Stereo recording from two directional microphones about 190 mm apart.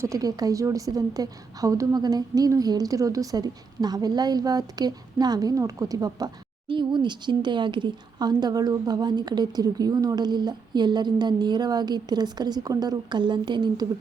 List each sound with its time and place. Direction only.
0.0 s a woman's voice: 20° right (ahead or behind)